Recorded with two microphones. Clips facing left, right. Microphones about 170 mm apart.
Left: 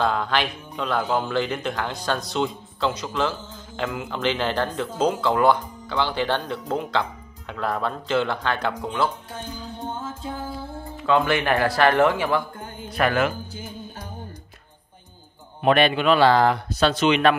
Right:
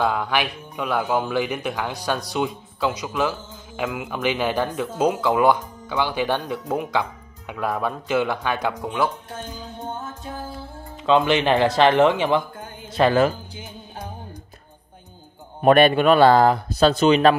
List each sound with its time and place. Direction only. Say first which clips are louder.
0.0 s speech: right 1 dB; 10° right (ahead or behind)
11.0 s speech: right 3 dB; 20° right (ahead or behind)
12.9 s speech: right 4 dB; 30° right (ahead or behind)
15.6 s a man's voice: right 4 dB; 45° right (ahead or behind)